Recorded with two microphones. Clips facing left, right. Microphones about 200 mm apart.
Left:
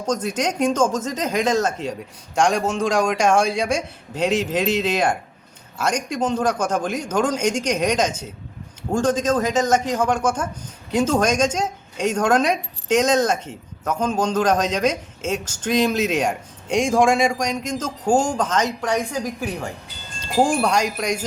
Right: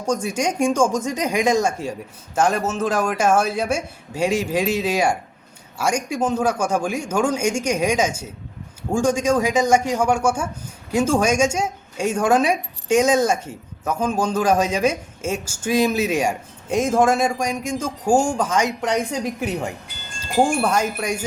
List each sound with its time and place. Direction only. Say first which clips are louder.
0.0 s speech: right 1 dB; 10° right (ahead or behind)
18.8 s a woman's voice: right 1 dB; 25° right (ahead or behind)
20.4 s wind chime: even; 5° right (ahead or behind)